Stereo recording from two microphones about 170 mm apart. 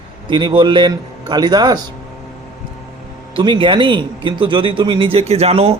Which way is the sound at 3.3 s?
30° right (ahead or behind).